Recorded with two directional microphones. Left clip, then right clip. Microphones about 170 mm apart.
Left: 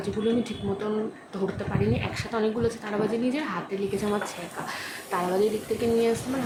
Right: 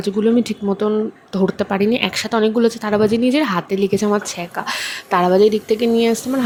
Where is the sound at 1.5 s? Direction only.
55° right (ahead or behind).